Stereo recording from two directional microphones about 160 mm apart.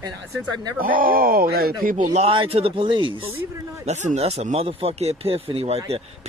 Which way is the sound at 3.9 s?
45° right (ahead or behind).